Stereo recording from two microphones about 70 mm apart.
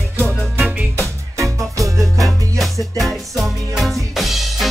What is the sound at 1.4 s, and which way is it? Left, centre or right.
Music, right.